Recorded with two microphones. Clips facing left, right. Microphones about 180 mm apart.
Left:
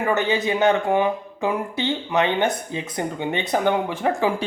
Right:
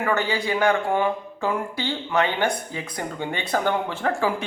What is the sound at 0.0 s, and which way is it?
Speech, 20° left (ahead or behind).